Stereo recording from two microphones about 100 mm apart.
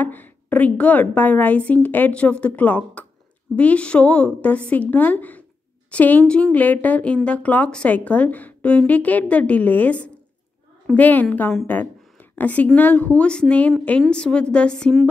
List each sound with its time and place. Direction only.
0.0 s a woman's voice: 20° left (ahead or behind)